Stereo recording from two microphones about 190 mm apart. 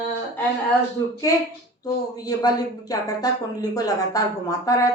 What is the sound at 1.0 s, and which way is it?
Speech, 20° left (ahead or behind).